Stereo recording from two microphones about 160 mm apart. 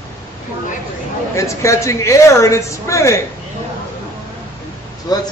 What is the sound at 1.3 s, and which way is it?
A man's voice, 20° left (ahead or behind).